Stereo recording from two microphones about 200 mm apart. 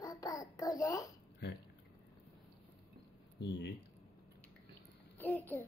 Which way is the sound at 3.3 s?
60° left (ahead or behind).